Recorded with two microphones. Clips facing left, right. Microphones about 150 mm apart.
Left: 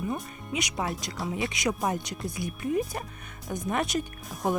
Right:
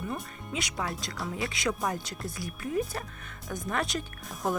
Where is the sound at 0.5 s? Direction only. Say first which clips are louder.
Left 3 dB; 20° left (ahead or behind).